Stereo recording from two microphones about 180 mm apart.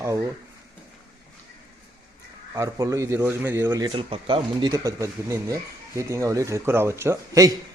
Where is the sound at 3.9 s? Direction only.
30° right (ahead or behind).